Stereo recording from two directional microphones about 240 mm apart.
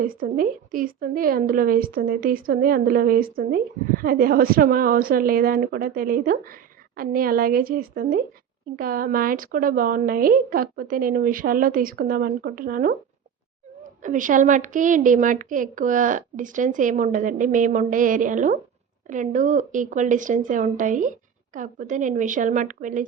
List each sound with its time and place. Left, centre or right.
0.0 s a woman's voice: right
14.0 s a woman's voice: right